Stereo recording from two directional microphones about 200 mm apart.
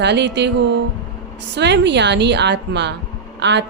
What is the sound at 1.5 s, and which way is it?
Speech, 60° right (ahead or behind).